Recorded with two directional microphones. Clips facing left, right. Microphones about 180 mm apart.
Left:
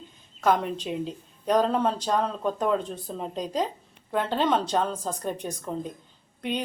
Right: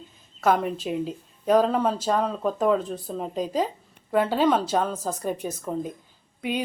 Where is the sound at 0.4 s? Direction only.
5° right (ahead or behind).